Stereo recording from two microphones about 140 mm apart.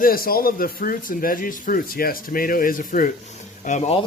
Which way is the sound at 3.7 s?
55° left (ahead or behind).